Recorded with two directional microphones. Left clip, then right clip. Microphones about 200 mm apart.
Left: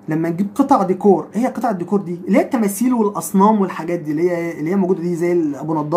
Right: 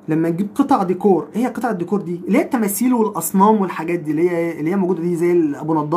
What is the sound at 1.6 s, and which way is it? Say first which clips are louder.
Speech: left 1 dB; 10° right (ahead or behind).